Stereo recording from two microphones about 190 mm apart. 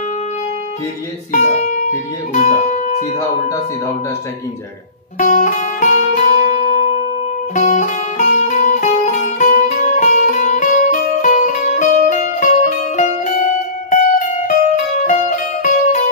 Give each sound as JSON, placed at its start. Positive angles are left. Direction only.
{"t": 1.3, "sound": "speech", "side_deg": 40}
{"t": 5.2, "sound": "music", "side_deg": 40}